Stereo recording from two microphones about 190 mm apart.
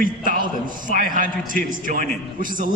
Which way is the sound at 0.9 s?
45° right (ahead or behind).